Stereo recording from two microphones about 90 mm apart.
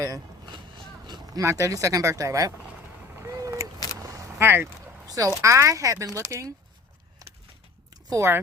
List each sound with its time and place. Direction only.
0.0 s vehicle: 40° right (ahead or behind)
0.5 s a sound: 60° right (ahead or behind)
1.4 s speech: 35° right (ahead or behind)
3.2 s vehicle: 35° right (ahead or behind)
3.9 s single-lens reflex camera: 35° right (ahead or behind)
4.4 s speech: 25° right (ahead or behind)
5.0 s a sound: 40° right (ahead or behind)
5.4 s speech: 35° right (ahead or behind)
8.1 s speech: 30° right (ahead or behind)